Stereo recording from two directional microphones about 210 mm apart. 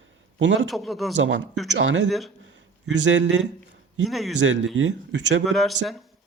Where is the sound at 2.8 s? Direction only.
60° right (ahead or behind).